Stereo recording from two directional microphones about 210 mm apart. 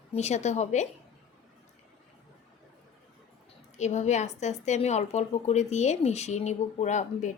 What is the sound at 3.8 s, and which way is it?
A woman's voice, 35° left (ahead or behind).